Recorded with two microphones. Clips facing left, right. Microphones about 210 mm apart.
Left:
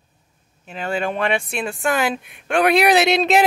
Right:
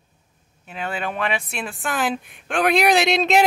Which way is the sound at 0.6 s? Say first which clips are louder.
Left 4 dB; 5° right (ahead or behind).